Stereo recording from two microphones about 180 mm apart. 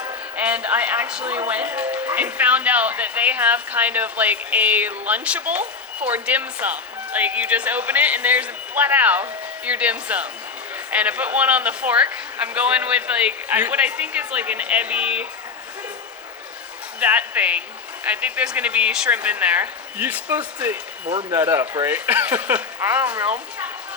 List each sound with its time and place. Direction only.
0.3 s speech: 5° right (ahead or behind)
17.0 s speech: 10° right (ahead or behind)
21.1 s speech: 25° right (ahead or behind)
21.3 s speech: 15° right (ahead or behind)